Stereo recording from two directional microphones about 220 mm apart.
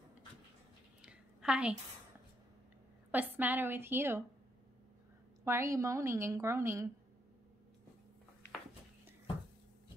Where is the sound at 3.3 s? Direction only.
10° right (ahead or behind).